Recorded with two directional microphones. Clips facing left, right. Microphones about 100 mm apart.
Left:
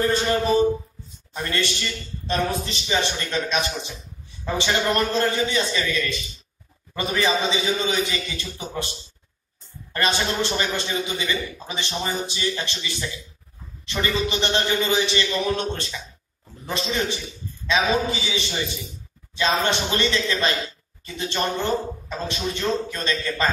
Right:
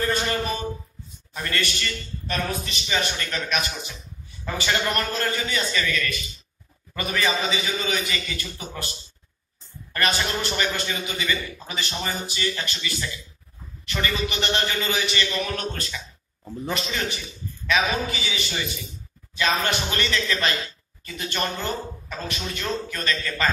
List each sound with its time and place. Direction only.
0.0 s a sound: 25° left (ahead or behind)
1.3 s a man's voice: 25° left (ahead or behind)
9.9 s a man's voice: 20° left (ahead or behind)